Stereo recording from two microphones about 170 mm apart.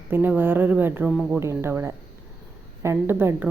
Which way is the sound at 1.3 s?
15° right (ahead or behind).